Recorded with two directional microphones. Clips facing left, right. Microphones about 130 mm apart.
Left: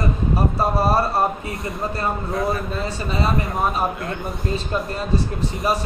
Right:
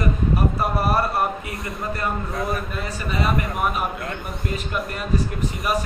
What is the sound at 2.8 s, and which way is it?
A man's voice, 30° left (ahead or behind).